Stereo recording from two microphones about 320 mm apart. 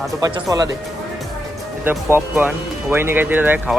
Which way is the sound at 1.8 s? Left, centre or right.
Centre.